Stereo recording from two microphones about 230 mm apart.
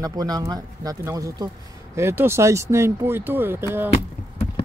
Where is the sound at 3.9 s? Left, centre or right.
Left.